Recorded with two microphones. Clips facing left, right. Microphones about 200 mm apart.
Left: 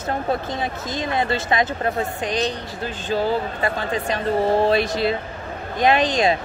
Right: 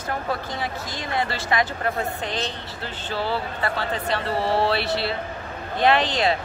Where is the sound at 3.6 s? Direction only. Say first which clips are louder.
Left 3 dB; 15° left (ahead or behind).